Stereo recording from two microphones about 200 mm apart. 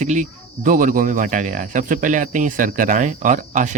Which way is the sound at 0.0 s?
40° right (ahead or behind).